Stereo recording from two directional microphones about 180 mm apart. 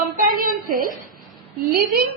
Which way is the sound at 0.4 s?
50° right (ahead or behind).